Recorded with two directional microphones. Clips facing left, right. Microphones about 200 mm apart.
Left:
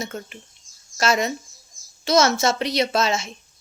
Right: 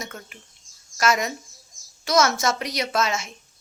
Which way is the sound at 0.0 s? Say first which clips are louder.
Left 6 dB; 25° left (ahead or behind).